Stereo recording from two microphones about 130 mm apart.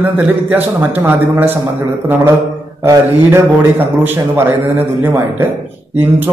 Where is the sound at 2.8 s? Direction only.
20° right (ahead or behind).